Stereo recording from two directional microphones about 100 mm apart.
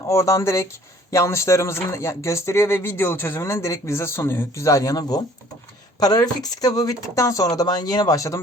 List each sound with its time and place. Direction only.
0.1 s speech: 30° left (ahead or behind)